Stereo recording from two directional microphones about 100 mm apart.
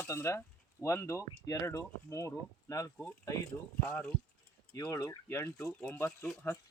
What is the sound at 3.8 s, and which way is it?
Speech, 15° left (ahead or behind).